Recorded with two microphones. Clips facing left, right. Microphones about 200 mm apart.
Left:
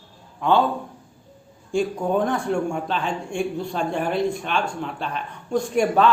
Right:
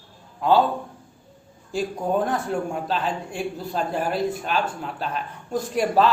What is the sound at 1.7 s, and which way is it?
Speech, 5° right (ahead or behind).